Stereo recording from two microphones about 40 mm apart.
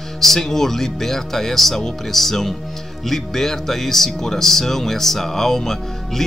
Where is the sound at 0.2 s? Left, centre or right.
Centre.